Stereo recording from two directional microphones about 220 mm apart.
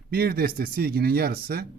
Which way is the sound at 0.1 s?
45° right (ahead or behind).